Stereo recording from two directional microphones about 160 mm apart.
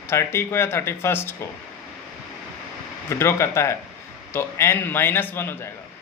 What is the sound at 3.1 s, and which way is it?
A man's voice, 15° left (ahead or behind).